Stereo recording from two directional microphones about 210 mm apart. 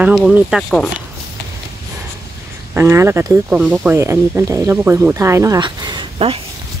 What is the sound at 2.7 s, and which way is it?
Speech, 10° right (ahead or behind).